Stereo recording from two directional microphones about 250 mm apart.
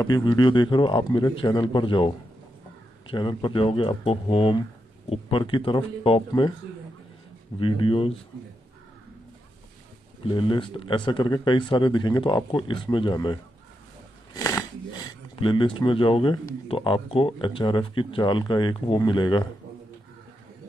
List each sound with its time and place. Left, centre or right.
0.0 s speech: centre
7.5 s speech: left
10.2 s speech: centre
14.3 s shuffling cards: centre
15.0 s speech: centre